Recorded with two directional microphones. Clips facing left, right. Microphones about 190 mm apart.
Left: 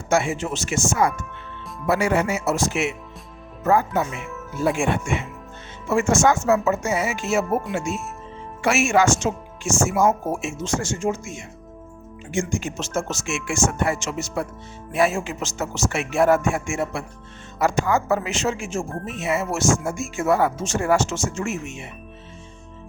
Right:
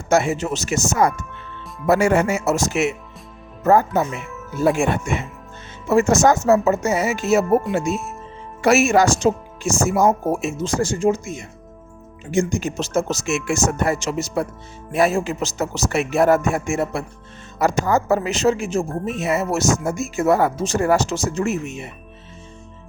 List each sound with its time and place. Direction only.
0.1 s speech: 40° right (ahead or behind)